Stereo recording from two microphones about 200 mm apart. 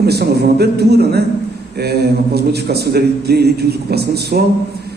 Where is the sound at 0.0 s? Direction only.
55° right (ahead or behind).